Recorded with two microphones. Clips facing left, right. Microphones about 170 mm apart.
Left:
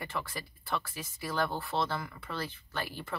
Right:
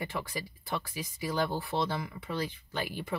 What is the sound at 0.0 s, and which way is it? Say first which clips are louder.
Speech: right 2 dB; 15° right (ahead or behind).